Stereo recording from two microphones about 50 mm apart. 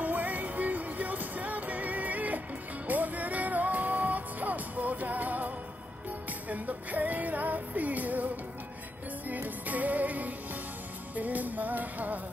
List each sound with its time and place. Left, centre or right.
0.0 s music: right
6.5 s music: right
9.3 s music: right